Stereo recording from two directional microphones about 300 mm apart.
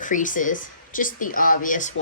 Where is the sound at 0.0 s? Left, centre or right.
Left.